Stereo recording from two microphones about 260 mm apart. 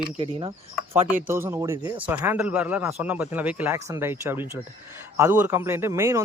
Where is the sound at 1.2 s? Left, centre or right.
Centre.